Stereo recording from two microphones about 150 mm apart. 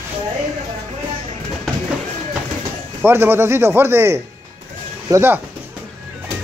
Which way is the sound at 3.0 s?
15° right (ahead or behind).